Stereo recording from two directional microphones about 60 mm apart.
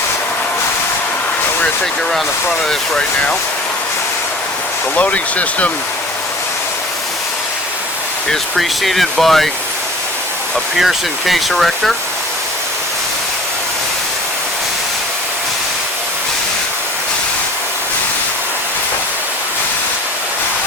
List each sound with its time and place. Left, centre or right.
4.9 s speech: left
8.3 s speech: centre
10.8 s speech: centre